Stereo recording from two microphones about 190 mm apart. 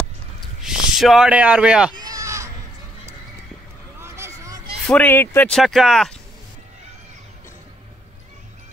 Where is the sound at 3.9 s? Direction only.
15° right (ahead or behind).